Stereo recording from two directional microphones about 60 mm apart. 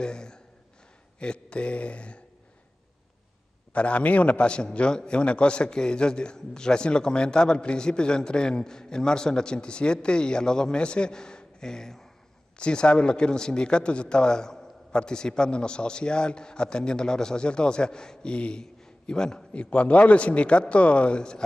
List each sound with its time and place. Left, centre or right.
0.0 s a man's voice: centre
3.7 s a man's voice: left